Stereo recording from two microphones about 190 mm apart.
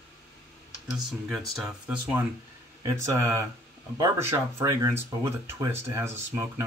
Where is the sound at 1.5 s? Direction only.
5° right (ahead or behind).